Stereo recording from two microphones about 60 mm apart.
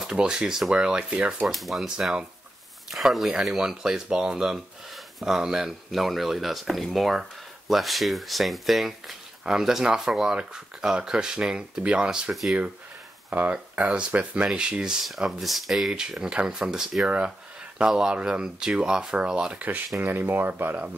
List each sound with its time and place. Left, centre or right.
0.0 s speech: centre
1.5 s speech: centre
2.0 s speech: centre
13.3 s speech: right
20.0 s speech: right